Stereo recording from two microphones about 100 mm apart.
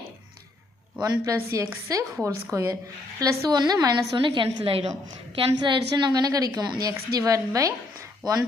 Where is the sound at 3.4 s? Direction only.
40° right (ahead or behind).